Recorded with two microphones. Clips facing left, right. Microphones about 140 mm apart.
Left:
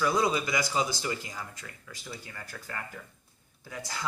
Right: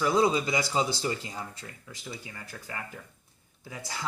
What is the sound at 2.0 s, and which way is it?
Speech, 15° right (ahead or behind).